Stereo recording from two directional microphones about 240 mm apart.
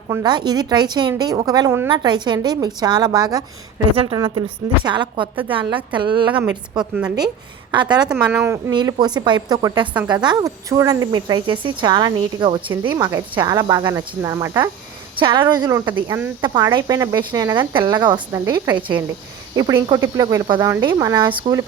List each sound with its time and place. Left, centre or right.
0.1 s speech: centre
6.4 s a woman's voice: centre
7.7 s speech: centre